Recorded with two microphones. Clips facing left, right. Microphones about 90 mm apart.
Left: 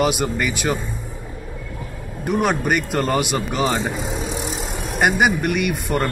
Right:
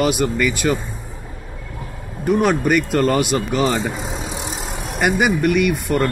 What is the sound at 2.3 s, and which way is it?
Speech, 15° left (ahead or behind).